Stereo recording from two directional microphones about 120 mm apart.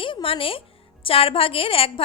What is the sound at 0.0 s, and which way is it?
A woman's voice, 45° left (ahead or behind).